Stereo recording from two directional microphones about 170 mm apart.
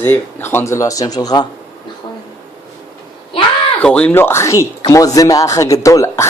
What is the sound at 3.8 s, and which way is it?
Speech, 5° left (ahead or behind).